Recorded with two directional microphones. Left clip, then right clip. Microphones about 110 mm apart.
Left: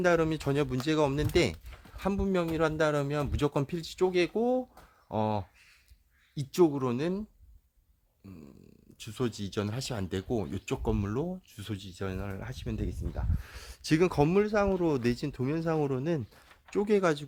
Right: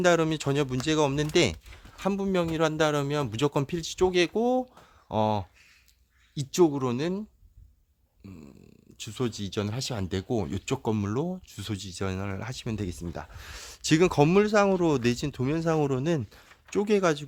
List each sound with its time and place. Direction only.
0.0 s speech: 30° right (ahead or behind)
14.3 s speech: 55° right (ahead or behind)
15.0 s speech: 35° right (ahead or behind)
16.6 s speech: 25° right (ahead or behind)